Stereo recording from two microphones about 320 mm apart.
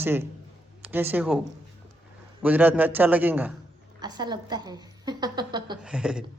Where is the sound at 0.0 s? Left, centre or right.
Centre.